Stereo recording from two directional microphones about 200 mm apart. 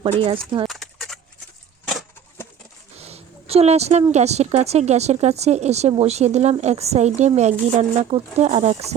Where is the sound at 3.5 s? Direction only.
30° right (ahead or behind).